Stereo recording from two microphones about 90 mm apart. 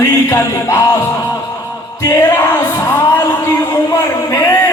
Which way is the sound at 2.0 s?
30° left (ahead or behind).